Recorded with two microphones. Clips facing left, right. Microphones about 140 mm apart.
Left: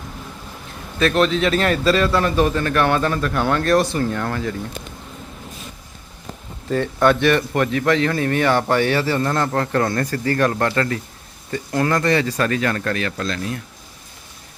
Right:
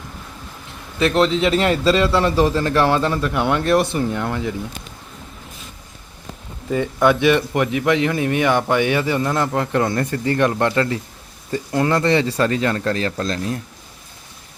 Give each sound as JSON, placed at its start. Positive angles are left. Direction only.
{"t": 0.9, "sound": "a man's voice", "side_deg": -20}
{"t": 6.7, "sound": "a man's voice", "side_deg": -10}